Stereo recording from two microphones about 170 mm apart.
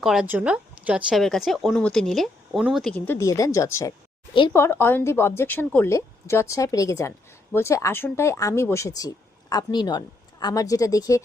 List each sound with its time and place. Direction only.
0.0 s speech: 5° right (ahead or behind)
3.2 s a woman's voice: 20° left (ahead or behind)